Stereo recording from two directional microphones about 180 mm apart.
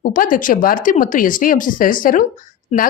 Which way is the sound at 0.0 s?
50° left (ahead or behind).